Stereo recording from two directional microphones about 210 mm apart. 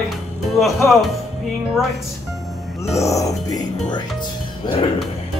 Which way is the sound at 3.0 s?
15° left (ahead or behind).